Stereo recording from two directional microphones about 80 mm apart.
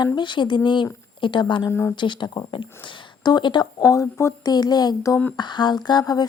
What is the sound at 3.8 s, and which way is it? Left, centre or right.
Speech, left.